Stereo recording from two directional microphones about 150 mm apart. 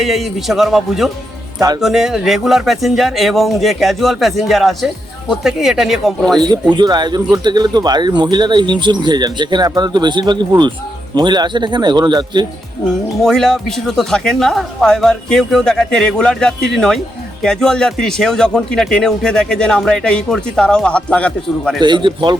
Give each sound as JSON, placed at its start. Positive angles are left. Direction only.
{"t": 0.0, "sound": "speech", "side_deg": 0}
{"t": 6.4, "sound": "speech", "side_deg": -30}
{"t": 13.2, "sound": "speech", "side_deg": 5}
{"t": 21.8, "sound": "a man's voice", "side_deg": -30}